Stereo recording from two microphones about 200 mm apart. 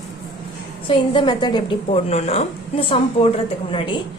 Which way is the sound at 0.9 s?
25° left (ahead or behind).